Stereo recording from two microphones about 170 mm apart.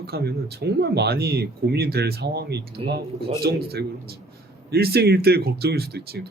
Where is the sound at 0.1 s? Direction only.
75° right (ahead or behind).